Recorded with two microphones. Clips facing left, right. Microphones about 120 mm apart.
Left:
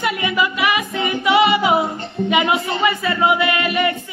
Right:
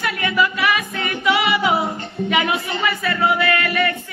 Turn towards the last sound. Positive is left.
turn(degrees=20)  # may be behind; listen again after turning